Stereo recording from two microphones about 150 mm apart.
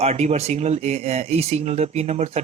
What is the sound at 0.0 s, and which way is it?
Speech, 45° right (ahead or behind).